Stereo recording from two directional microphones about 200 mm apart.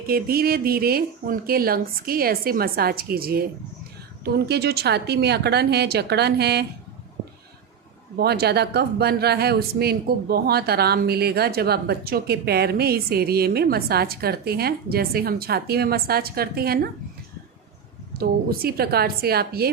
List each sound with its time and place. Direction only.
0.1 s a woman's voice: 50° right (ahead or behind)
8.2 s speech: 55° right (ahead or behind)
18.1 s speech: 50° right (ahead or behind)